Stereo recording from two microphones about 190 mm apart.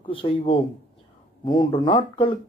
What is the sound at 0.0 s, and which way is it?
Speech, 25° left (ahead or behind).